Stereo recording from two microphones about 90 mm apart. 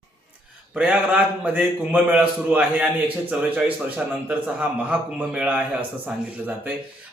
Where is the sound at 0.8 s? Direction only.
15° right (ahead or behind).